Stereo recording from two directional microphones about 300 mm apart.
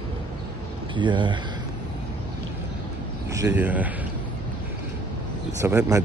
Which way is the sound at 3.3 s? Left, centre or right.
Centre.